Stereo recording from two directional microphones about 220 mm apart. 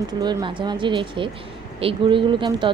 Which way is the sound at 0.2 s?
20° right (ahead or behind).